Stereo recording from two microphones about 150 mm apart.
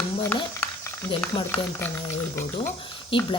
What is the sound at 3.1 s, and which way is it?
Speech, 35° left (ahead or behind).